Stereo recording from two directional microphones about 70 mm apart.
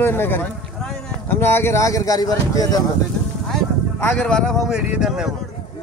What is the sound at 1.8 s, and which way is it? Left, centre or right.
Speech, left.